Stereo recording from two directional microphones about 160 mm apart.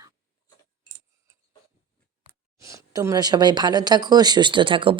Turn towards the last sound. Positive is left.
turn(degrees=-30)  # may be behind; listen again after turning